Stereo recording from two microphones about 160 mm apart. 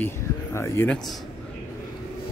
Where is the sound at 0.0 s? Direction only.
15° left (ahead or behind).